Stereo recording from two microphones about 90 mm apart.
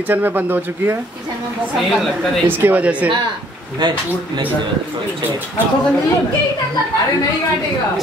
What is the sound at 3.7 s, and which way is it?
Speech, 55° right (ahead or behind).